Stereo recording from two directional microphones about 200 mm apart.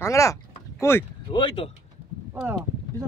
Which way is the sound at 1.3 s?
25° left (ahead or behind).